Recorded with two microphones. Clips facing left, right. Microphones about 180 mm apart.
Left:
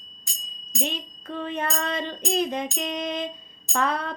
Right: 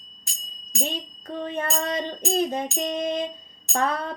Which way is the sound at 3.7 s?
45° right (ahead or behind).